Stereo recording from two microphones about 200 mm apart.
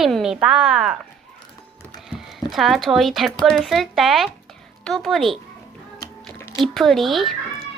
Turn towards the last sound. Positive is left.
turn(degrees=0)  # may be behind; listen again after turning